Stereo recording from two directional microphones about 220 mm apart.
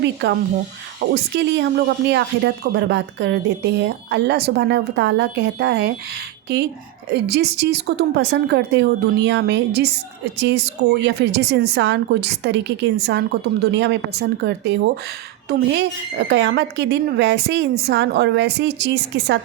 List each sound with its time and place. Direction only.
0.0 s speech: 50° right (ahead or behind)